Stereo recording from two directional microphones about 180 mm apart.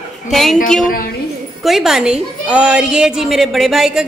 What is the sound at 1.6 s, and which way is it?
A woman's voice, centre (ahead or behind).